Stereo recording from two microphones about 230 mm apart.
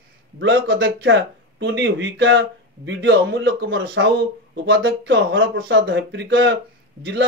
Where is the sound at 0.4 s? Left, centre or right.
Right.